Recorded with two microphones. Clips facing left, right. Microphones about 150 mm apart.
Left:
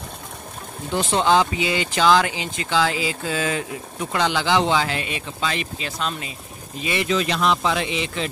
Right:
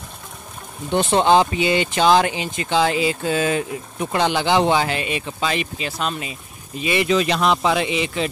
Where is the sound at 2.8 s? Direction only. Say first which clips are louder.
Right 4 dB; 55° right (ahead or behind).